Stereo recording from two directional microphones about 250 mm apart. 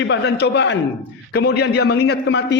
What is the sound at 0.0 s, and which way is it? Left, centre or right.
A man's voice, left.